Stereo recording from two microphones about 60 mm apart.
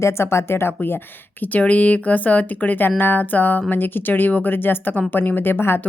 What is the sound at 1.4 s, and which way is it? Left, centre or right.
Speech, left.